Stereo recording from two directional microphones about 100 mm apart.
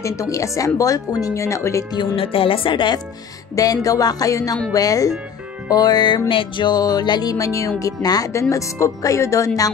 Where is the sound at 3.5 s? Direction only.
35° left (ahead or behind).